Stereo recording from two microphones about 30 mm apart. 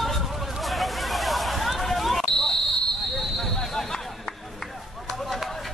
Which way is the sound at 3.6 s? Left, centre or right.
Centre.